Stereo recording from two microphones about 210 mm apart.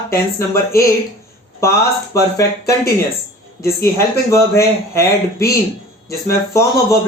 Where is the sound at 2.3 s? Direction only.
15° left (ahead or behind).